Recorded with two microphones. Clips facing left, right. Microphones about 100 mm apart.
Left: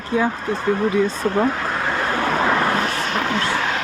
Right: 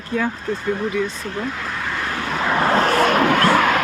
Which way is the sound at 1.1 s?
50° left (ahead or behind).